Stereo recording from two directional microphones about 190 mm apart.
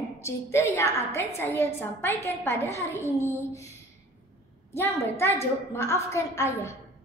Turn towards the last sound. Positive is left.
turn(degrees=15)  # may be behind; listen again after turning